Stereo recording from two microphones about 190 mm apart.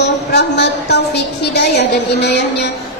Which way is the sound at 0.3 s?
60° left (ahead or behind).